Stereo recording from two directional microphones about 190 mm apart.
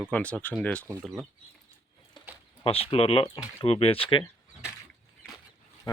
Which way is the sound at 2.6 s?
30° left (ahead or behind).